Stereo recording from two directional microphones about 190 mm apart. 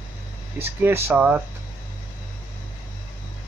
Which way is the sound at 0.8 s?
10° right (ahead or behind).